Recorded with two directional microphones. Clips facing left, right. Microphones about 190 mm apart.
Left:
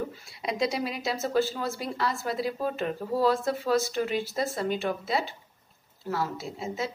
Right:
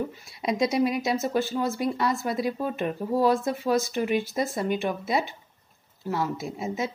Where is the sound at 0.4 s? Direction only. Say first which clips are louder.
Right 5 dB; 20° right (ahead or behind).